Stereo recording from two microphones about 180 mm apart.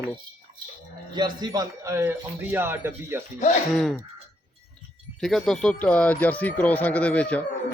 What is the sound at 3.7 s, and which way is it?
Speech, centre (ahead or behind).